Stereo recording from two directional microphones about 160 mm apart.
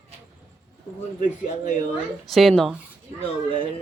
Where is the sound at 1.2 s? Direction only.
50° left (ahead or behind).